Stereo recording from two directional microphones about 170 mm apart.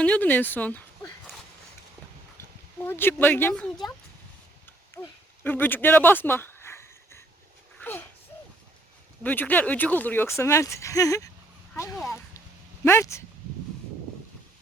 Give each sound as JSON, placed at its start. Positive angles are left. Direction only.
{"t": 0.0, "sound": "speech", "side_deg": 10}
{"t": 2.7, "sound": "speech", "side_deg": 15}
{"t": 5.0, "sound": "speech", "side_deg": 10}
{"t": 5.4, "sound": "a sound", "side_deg": 10}
{"t": 9.2, "sound": "speech", "side_deg": 10}